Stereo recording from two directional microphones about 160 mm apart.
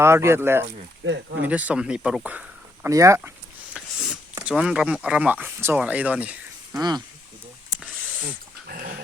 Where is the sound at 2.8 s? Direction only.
20° right (ahead or behind).